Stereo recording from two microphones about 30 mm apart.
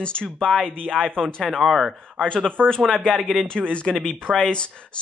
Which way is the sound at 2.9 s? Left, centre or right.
Centre.